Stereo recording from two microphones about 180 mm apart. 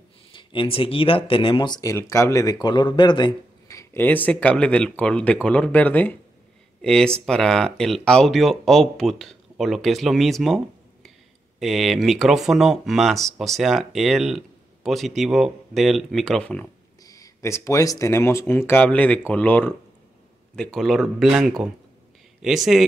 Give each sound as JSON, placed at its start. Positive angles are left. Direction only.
{"t": 0.3, "sound": "speech", "side_deg": 25}
{"t": 10.4, "sound": "a sound", "side_deg": 0}
{"t": 11.6, "sound": "speech", "side_deg": 0}
{"t": 17.0, "sound": "speech", "side_deg": 20}